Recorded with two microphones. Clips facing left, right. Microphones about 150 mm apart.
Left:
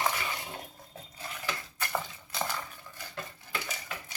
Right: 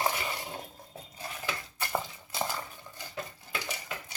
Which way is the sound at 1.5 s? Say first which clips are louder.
Even; 15° right (ahead or behind).